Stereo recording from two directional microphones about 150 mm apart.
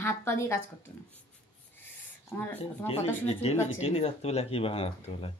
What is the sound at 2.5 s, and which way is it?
Speech, 45° left (ahead or behind).